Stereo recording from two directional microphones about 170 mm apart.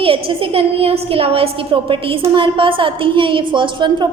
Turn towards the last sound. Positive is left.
turn(degrees=-30)  # may be behind; listen again after turning